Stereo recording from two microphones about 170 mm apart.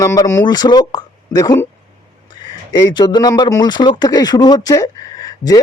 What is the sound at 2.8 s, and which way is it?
Speech, 25° left (ahead or behind).